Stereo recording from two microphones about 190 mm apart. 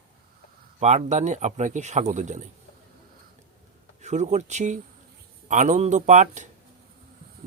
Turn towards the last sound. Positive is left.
turn(degrees=-40)  # may be behind; listen again after turning